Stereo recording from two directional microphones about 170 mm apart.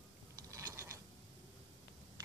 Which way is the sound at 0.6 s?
15° right (ahead or behind).